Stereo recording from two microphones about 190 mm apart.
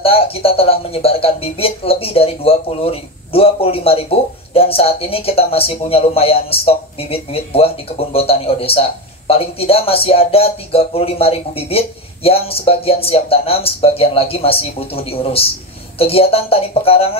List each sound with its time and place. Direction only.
0.0 s speech: 30° left (ahead or behind)